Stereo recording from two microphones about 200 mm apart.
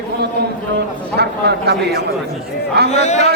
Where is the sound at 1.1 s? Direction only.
55° right (ahead or behind).